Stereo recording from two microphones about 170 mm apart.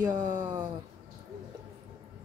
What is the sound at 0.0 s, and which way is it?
Speech, 15° right (ahead or behind).